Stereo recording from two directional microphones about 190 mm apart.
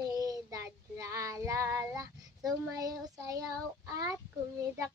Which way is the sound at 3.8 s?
15° right (ahead or behind).